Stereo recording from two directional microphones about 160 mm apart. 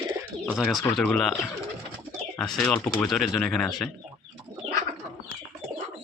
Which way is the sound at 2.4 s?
5° left (ahead or behind).